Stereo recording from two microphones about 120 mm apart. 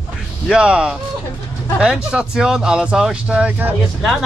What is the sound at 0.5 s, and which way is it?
Speech, 10° right (ahead or behind).